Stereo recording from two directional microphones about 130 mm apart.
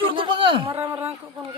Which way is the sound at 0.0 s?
40° right (ahead or behind).